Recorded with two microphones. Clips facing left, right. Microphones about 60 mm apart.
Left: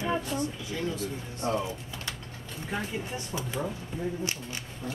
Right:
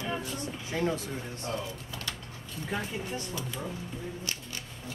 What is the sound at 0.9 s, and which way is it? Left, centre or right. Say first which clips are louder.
Speech: left 1 dB; left.